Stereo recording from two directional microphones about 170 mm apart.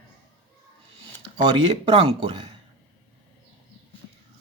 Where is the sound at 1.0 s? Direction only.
25° right (ahead or behind).